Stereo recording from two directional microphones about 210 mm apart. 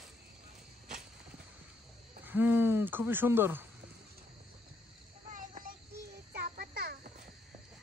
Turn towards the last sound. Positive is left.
turn(degrees=-40)  # may be behind; listen again after turning